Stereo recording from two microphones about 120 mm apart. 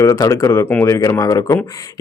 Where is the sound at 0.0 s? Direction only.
25° left (ahead or behind).